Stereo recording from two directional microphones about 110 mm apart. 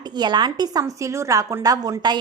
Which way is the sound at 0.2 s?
40° right (ahead or behind).